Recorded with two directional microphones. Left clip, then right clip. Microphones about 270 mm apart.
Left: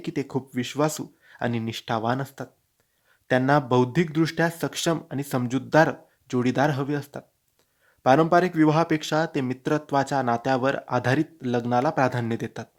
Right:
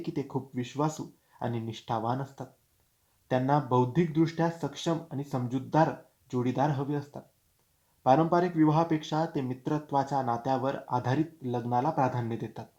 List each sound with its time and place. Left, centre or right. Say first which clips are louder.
0.0 s speech: left 5 dB; left